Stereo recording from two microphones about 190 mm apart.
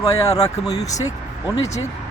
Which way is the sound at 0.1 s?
20° left (ahead or behind).